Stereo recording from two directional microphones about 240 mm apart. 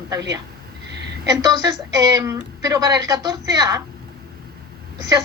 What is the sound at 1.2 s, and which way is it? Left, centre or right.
A woman's voice, centre.